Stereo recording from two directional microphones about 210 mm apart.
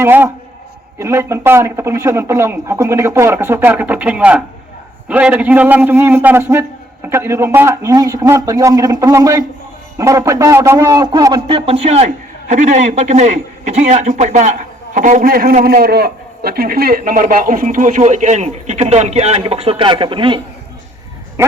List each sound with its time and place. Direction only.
0.0 s a man's voice: 10° right (ahead or behind)